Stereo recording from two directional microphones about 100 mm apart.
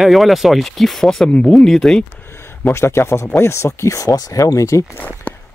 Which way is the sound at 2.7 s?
25° left (ahead or behind).